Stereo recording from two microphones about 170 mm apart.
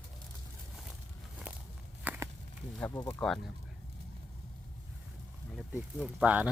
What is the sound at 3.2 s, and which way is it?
Speech, centre (ahead or behind).